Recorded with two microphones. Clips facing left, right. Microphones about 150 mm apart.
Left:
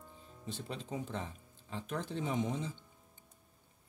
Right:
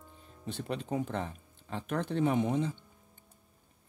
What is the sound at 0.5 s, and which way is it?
Speech, 60° right (ahead or behind).